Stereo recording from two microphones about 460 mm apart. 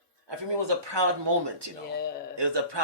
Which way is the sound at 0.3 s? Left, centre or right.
Right.